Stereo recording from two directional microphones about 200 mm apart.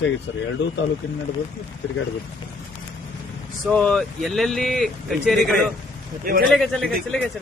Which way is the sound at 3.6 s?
5° left (ahead or behind).